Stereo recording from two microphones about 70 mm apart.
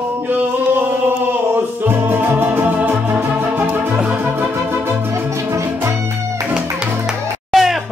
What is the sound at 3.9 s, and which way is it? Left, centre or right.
Organ, right.